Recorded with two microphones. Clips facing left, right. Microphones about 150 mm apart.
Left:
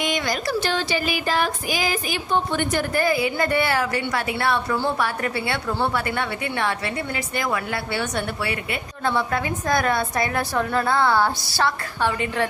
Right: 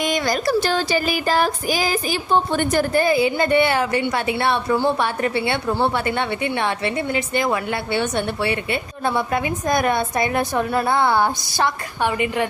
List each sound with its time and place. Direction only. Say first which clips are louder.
0.0 s child singing: right 4 dB; 40° right (ahead or behind)
2.9 s a woman's voice: right 3 dB; 25° right (ahead or behind)